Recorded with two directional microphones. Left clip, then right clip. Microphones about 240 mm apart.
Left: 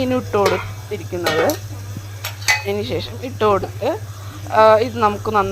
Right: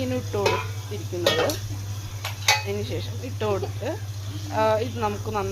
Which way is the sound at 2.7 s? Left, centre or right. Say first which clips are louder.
Left 8 dB; left.